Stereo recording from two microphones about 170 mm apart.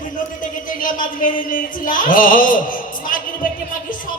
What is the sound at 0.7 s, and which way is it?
Music, 55° left (ahead or behind).